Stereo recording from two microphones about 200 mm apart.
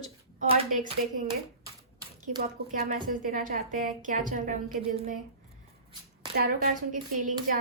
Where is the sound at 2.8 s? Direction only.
45° right (ahead or behind).